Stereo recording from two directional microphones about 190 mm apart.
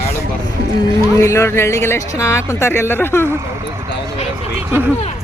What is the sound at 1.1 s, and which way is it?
A man's voice, 15° left (ahead or behind).